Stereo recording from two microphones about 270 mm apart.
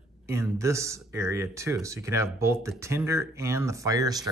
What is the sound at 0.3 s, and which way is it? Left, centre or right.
Speech, centre.